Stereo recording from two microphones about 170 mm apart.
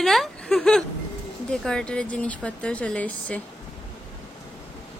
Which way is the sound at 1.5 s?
5° left (ahead or behind).